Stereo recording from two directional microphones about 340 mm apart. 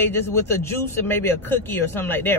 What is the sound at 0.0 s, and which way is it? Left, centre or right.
A man's voice, centre.